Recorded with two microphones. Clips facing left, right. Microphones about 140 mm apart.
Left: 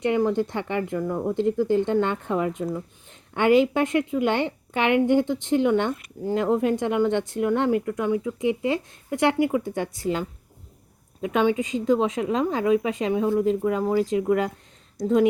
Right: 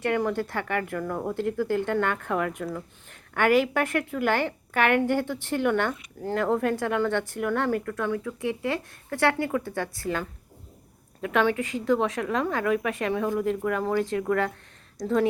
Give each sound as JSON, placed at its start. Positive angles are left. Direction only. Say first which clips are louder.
{"t": 0.0, "sound": "speech", "louder": "left 4 dB", "side_deg": 15}